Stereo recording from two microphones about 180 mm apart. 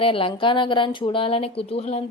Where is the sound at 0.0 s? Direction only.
30° left (ahead or behind).